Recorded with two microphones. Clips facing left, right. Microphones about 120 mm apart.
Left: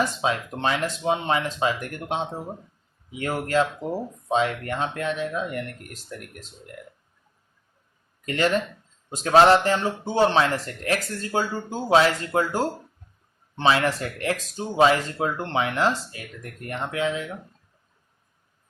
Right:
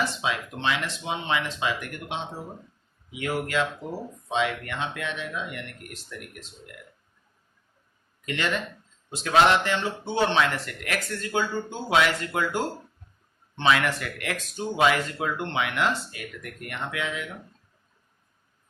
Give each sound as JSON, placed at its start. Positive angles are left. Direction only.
{"t": 0.0, "sound": "a man's voice", "side_deg": 40}
{"t": 8.2, "sound": "a man's voice", "side_deg": 40}